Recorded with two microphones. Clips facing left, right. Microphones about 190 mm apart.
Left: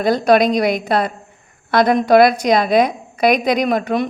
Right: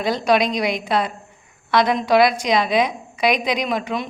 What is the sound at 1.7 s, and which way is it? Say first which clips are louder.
A woman's voice: left 5 dB; 50° left (ahead or behind).